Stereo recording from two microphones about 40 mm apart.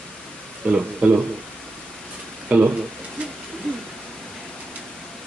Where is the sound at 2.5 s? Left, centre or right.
Right.